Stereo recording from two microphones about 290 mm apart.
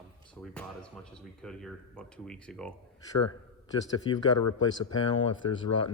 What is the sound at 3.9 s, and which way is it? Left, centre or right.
Speech, centre.